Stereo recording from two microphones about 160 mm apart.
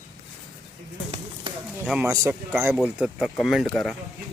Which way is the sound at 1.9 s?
10° right (ahead or behind).